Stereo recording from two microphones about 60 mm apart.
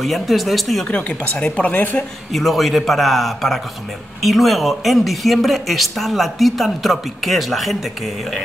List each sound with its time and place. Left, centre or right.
0.0 s speech: centre
0.8 s speech: left
2.3 s speech: centre